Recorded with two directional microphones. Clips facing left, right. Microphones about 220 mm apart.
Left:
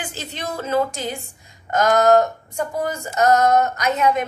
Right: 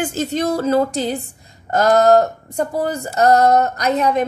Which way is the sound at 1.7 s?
35° right (ahead or behind).